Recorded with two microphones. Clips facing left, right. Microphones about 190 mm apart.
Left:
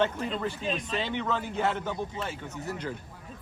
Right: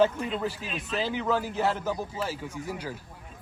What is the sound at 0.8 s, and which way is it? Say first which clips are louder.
Speech: right 1 dB; 5° right (ahead or behind).